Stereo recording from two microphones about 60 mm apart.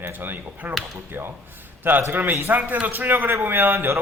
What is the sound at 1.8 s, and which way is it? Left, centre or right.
A man's voice, right.